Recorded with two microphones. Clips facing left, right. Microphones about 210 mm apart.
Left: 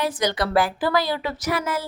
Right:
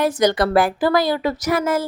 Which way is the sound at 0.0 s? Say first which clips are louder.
Right 6 dB; 45° right (ahead or behind).